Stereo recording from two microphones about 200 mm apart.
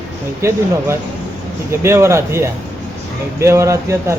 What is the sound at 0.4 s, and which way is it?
Speech, 15° right (ahead or behind).